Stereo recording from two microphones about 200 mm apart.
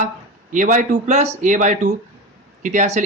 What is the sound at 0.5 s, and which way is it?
Speech, 40° right (ahead or behind).